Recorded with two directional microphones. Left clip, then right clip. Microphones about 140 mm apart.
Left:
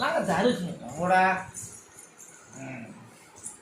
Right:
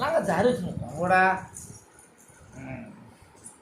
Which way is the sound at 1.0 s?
20° right (ahead or behind).